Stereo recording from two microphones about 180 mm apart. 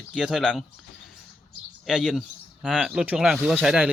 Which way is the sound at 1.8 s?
5° right (ahead or behind).